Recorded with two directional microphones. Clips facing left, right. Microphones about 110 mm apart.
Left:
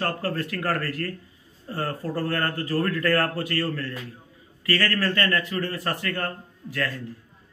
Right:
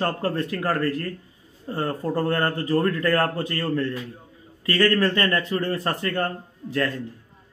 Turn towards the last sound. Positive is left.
turn(degrees=-25)  # may be behind; listen again after turning